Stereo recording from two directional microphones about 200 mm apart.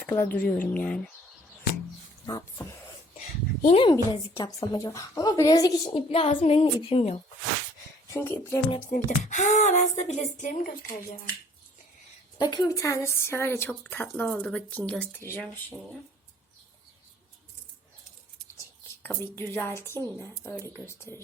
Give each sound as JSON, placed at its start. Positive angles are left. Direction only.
{"t": 0.0, "sound": "speech", "side_deg": 10}
{"t": 2.2, "sound": "a woman's voice", "side_deg": 15}
{"t": 3.6, "sound": "speech", "side_deg": 35}
{"t": 3.8, "sound": "a woman's voice", "side_deg": 20}
{"t": 8.1, "sound": "a woman's voice", "side_deg": 10}
{"t": 8.9, "sound": "speech", "side_deg": 40}
{"t": 12.4, "sound": "a woman's voice", "side_deg": 20}
{"t": 19.0, "sound": "a woman's voice", "side_deg": 10}